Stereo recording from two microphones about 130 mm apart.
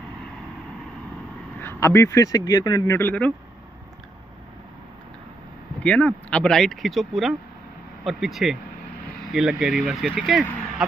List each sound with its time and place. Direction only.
1.6 s speech: 20° left (ahead or behind)
3.0 s speech: 10° left (ahead or behind)
5.8 s speech: 10° left (ahead or behind)